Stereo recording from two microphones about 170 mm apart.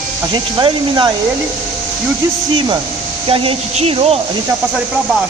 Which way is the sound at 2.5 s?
25° right (ahead or behind).